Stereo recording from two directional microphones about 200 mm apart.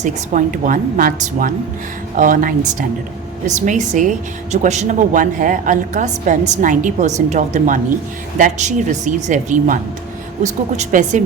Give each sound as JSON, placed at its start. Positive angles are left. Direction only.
{"t": 0.0, "sound": "a woman's voice", "side_deg": -40}